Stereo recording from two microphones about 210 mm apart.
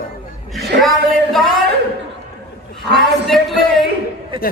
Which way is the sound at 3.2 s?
Centre (ahead or behind).